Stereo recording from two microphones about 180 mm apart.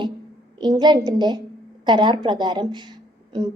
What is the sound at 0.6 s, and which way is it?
A woman's voice, 25° right (ahead or behind).